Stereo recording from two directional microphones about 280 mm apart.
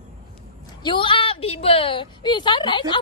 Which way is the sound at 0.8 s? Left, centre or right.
Centre.